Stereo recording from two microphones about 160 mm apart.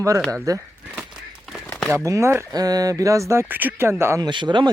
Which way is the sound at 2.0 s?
20° right (ahead or behind).